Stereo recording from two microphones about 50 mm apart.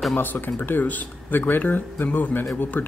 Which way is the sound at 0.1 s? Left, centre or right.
Left.